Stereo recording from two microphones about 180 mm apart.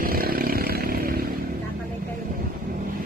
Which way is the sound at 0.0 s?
55° right (ahead or behind).